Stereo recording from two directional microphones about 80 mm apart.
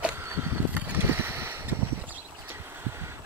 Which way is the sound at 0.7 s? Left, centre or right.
Right.